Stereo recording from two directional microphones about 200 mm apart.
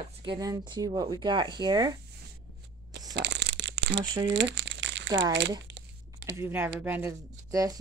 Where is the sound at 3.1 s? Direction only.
60° right (ahead or behind).